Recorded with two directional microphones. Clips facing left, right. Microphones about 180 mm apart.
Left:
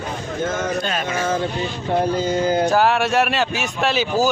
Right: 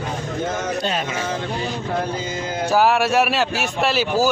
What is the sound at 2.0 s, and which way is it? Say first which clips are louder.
Speech: left 7 dB; 35° left (ahead or behind).